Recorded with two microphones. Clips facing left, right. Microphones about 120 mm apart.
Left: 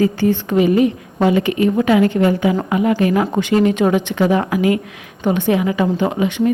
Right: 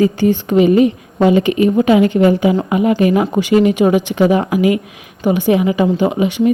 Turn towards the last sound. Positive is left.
turn(degrees=-15)  # may be behind; listen again after turning